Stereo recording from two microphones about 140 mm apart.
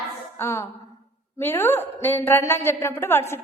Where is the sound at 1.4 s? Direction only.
15° left (ahead or behind).